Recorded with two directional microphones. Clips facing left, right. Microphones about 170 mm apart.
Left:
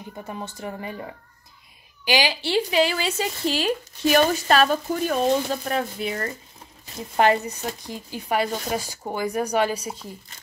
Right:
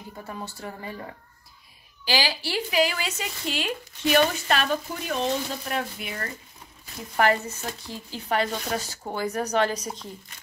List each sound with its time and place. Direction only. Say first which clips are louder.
0.3 s speech: left 3 dB; 20° left (ahead or behind)
7.2 s speech: left 3 dB; 20° left (ahead or behind)